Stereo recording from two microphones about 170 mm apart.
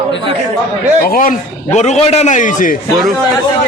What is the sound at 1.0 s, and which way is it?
A man's voice, 60° left (ahead or behind).